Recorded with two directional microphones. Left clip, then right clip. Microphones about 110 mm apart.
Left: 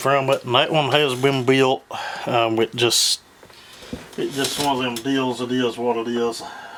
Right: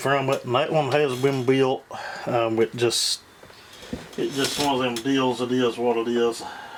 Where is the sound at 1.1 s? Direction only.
45° left (ahead or behind); by 3.2 s 30° left (ahead or behind).